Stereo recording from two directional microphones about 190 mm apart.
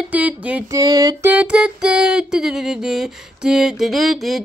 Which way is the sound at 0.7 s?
20° right (ahead or behind).